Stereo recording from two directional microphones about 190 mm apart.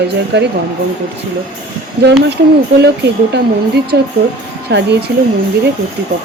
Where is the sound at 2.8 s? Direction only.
60° right (ahead or behind).